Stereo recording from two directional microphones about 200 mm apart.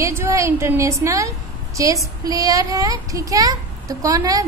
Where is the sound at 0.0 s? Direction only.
15° right (ahead or behind).